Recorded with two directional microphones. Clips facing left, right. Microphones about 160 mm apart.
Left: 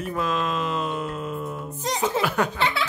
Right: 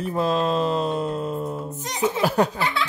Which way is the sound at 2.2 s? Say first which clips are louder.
Right 5 dB; 35° right (ahead or behind).